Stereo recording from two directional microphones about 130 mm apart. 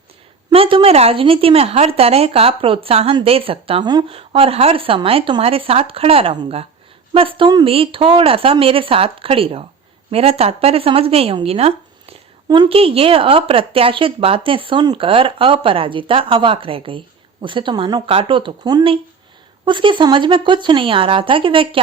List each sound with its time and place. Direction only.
0.5 s a woman's voice: 45° right (ahead or behind)